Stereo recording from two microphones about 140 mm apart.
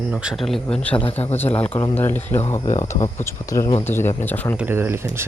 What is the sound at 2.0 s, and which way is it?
A man's voice, 15° left (ahead or behind).